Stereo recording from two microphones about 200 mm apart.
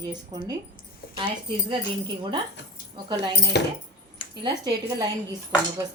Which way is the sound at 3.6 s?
60° left (ahead or behind).